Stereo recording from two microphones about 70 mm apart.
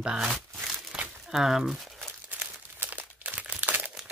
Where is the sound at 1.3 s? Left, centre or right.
Centre.